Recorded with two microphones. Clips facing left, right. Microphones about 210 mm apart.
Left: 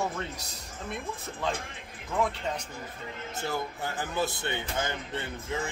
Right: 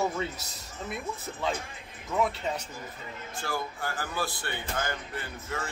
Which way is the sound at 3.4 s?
20° left (ahead or behind).